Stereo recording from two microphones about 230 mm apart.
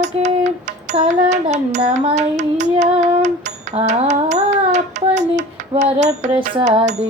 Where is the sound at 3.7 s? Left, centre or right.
Right.